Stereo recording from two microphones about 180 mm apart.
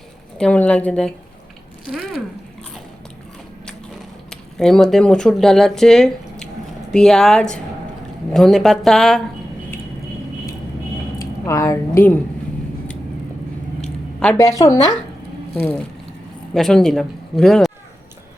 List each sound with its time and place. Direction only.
0.3 s a woman's voice: 5° left (ahead or behind)
4.3 s speech: 5° left (ahead or behind)
11.4 s a woman's voice: 15° left (ahead or behind)
14.3 s a woman's voice: 20° left (ahead or behind)
16.6 s speech: 5° left (ahead or behind)